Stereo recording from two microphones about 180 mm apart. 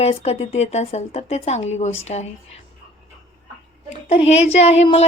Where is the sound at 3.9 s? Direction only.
35° left (ahead or behind).